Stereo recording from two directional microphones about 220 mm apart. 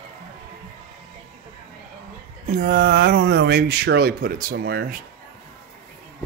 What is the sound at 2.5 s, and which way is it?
Speech, 35° right (ahead or behind).